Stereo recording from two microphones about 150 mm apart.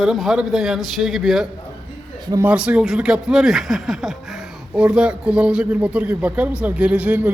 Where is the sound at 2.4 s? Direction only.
10° right (ahead or behind).